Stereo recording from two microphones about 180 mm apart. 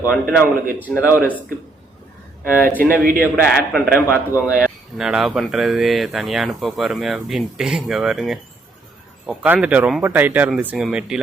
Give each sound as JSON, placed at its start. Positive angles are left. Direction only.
{"t": 0.0, "sound": "a man's voice", "side_deg": 10}
{"t": 2.4, "sound": "speech", "side_deg": 15}
{"t": 3.0, "sound": "a man's voice", "side_deg": -55}
{"t": 3.3, "sound": "a man's voice", "side_deg": 10}
{"t": 4.9, "sound": "speech", "side_deg": 0}